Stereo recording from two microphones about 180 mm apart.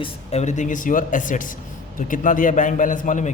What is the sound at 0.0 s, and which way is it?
A man's voice, 35° left (ahead or behind).